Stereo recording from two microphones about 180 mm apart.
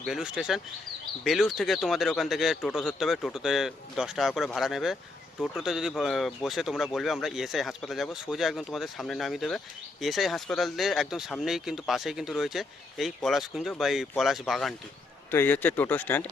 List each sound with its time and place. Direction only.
0.0 s speech: centre (ahead or behind)